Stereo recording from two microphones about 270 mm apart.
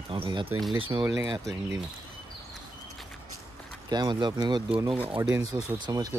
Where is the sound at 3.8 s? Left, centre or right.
Centre.